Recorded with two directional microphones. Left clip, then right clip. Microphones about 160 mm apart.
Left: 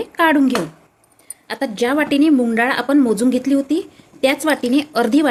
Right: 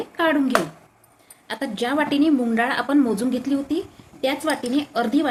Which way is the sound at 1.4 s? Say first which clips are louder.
Left 6 dB; 40° left (ahead or behind).